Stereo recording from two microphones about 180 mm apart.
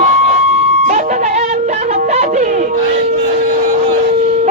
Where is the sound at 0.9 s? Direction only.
45° right (ahead or behind).